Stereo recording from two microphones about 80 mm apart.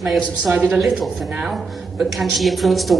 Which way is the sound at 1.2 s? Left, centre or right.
Centre.